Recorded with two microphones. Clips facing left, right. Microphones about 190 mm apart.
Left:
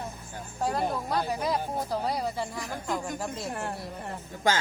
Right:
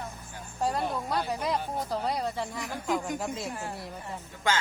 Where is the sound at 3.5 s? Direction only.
60° left (ahead or behind).